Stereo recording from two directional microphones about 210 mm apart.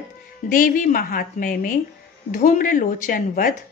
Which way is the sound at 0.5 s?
40° left (ahead or behind).